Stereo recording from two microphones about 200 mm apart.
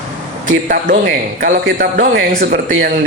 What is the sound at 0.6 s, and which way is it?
A man's voice, 45° right (ahead or behind).